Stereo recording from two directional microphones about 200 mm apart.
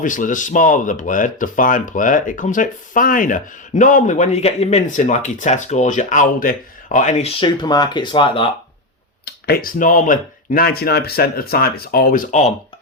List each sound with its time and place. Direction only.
0.0 s speech: 40° left (ahead or behind); by 8.4 s 25° left (ahead or behind)
9.2 s speech: 50° left (ahead or behind)